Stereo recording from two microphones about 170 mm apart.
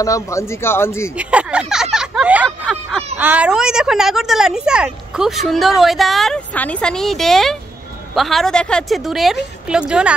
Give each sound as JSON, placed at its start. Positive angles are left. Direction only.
{"t": 0.0, "sound": "speech", "side_deg": 20}
{"t": 1.1, "sound": "speech", "side_deg": -5}